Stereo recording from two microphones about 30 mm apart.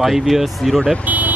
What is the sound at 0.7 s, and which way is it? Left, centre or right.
Speech, left.